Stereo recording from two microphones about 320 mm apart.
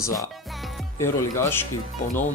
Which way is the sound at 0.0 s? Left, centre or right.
Centre.